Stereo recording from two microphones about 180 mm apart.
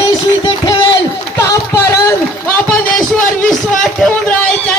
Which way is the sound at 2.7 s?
5° left (ahead or behind).